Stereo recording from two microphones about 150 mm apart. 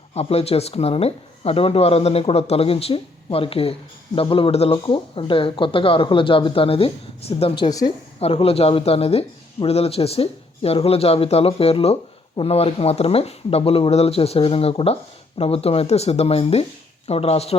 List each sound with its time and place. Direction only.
0.1 s speech: 45° left (ahead or behind); by 7.9 s 25° left (ahead or behind)
8.2 s speech: 40° left (ahead or behind)